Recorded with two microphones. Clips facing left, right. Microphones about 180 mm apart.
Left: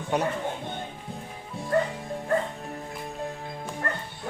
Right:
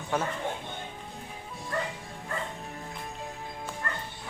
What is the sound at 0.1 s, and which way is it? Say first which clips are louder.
Speech: left 4 dB; 20° left (ahead or behind).